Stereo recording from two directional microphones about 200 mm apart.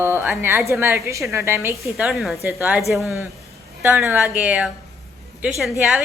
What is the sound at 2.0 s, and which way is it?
A woman's voice, centre (ahead or behind).